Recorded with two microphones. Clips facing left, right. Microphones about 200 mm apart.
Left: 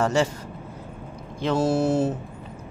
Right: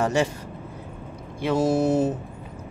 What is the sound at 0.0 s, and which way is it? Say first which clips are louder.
Speech: left 1 dB; 15° right (ahead or behind).